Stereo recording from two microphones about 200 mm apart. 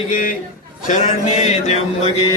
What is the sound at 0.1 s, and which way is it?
Speech, 45° left (ahead or behind).